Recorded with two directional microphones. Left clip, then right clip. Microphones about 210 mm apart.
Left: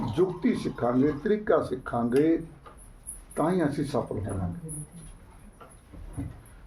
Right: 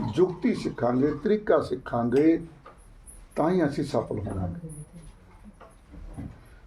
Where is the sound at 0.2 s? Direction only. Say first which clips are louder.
Right 2 dB; 30° right (ahead or behind).